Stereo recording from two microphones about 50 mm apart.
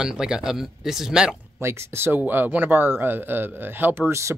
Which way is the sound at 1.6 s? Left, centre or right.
Right.